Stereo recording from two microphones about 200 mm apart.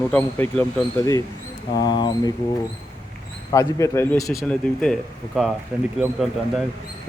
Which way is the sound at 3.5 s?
15° left (ahead or behind).